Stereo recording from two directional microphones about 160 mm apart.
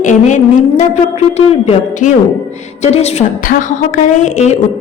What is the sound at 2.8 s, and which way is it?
Music, 45° left (ahead or behind).